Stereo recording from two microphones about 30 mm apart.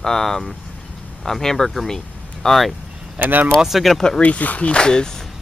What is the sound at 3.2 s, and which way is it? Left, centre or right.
Speech, right.